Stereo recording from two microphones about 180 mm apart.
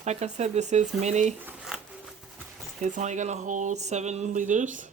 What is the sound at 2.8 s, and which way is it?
Speech, 40° right (ahead or behind).